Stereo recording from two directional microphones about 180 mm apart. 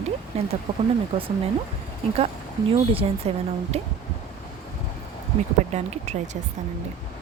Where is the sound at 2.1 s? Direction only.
35° right (ahead or behind).